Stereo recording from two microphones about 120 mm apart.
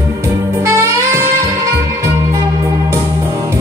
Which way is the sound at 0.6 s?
25° right (ahead or behind).